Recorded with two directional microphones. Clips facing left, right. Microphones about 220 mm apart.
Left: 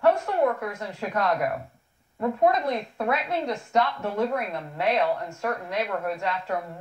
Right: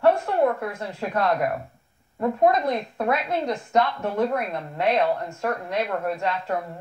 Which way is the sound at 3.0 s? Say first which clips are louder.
Right 2 dB; 40° right (ahead or behind).